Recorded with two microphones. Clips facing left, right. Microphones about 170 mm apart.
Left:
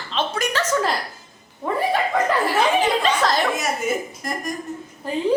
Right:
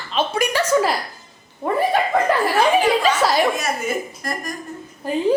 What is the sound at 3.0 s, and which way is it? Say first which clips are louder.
Chatter: right 2 dB; 10° right (ahead or behind).